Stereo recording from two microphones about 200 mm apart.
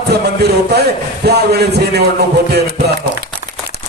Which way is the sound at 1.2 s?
55° right (ahead or behind).